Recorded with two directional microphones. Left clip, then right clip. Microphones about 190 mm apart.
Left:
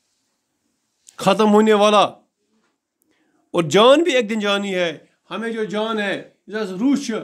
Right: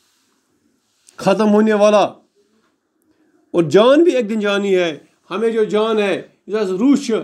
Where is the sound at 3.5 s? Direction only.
20° left (ahead or behind); by 5.0 s centre (ahead or behind).